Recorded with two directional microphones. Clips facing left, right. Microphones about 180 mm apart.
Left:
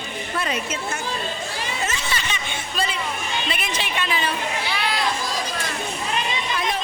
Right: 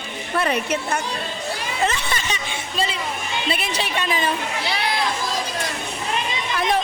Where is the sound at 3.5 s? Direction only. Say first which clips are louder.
Right 3 dB; 35° right (ahead or behind).